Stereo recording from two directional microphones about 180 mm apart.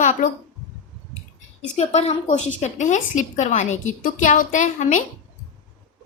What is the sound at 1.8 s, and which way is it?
A woman's voice, 40° left (ahead or behind).